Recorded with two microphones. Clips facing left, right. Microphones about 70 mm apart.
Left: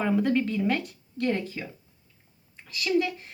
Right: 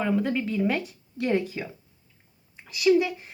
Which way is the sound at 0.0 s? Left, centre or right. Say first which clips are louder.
Left 1 dB; centre.